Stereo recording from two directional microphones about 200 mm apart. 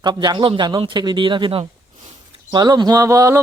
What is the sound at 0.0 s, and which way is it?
Speech, 20° right (ahead or behind).